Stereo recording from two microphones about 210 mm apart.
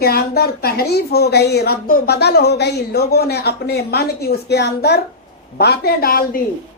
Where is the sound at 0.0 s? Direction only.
50° left (ahead or behind).